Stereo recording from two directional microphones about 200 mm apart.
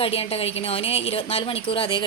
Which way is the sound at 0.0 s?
30° left (ahead or behind).